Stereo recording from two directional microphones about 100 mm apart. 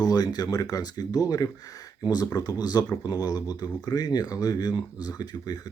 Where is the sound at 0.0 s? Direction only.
40° left (ahead or behind).